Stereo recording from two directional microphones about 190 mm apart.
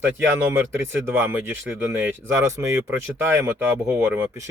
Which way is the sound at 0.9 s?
10° right (ahead or behind).